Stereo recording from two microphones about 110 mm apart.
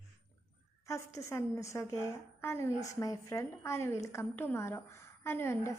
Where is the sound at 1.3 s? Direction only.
25° left (ahead or behind).